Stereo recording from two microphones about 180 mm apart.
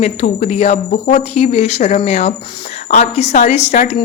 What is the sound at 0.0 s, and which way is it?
Speech, 35° left (ahead or behind).